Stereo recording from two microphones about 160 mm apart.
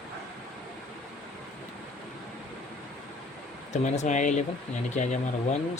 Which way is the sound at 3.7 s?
45° left (ahead or behind).